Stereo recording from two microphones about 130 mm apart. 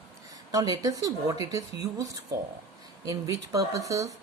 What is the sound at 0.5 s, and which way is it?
Speech, 30° right (ahead or behind).